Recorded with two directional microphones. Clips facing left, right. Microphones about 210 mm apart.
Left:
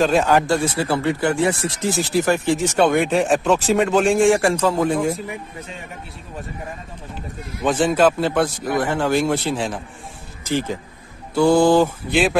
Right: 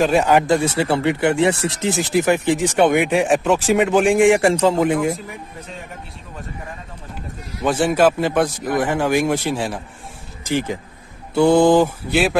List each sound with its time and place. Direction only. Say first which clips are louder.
0.0 s speech: right 1 dB; 15° right (ahead or behind)
7.6 s speech: right 1 dB; 10° right (ahead or behind)
12.1 s speech: even; centre (ahead or behind)